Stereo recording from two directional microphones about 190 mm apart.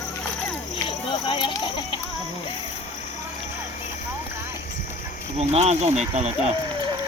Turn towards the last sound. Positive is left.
turn(degrees=-35)  # may be behind; listen again after turning